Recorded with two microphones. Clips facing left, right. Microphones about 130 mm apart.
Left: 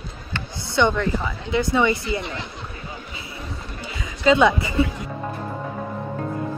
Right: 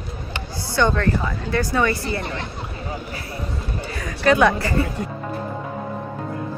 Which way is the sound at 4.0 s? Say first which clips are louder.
Even; 20° left (ahead or behind).